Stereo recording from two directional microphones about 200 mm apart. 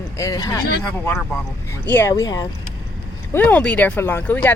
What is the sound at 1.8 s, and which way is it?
Speech, 10° left (ahead or behind).